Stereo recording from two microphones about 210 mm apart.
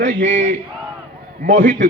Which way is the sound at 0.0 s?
60° right (ahead or behind).